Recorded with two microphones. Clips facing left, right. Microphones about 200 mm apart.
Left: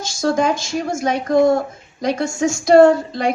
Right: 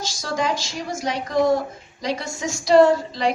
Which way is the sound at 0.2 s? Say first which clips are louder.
Left 8 dB; 50° left (ahead or behind).